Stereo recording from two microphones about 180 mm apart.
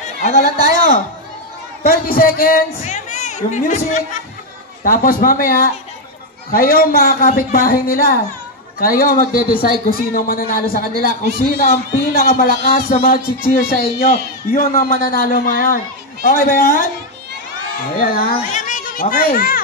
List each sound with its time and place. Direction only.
0.0 s a man's voice: 50° left (ahead or behind)
2.8 s a man's voice: 40° left (ahead or behind)
17.9 s a child's voice: 50° left (ahead or behind)